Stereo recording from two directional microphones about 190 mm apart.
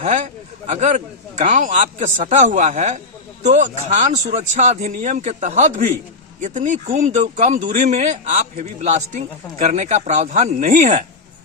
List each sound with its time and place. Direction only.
0.7 s speech: 40° right (ahead or behind)